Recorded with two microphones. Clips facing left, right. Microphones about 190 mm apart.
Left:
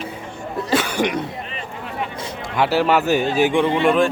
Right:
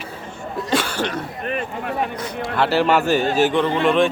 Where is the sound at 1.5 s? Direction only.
55° right (ahead or behind).